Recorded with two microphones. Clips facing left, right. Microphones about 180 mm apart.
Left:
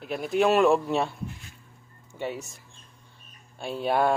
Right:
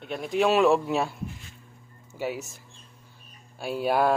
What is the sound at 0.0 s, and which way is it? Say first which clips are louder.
Speech: left 1 dB; centre (ahead or behind).